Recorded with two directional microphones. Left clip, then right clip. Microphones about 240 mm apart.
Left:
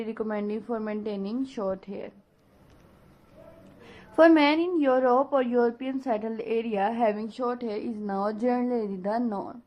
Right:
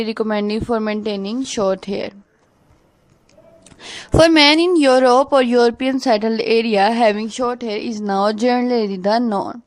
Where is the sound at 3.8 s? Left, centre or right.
Right.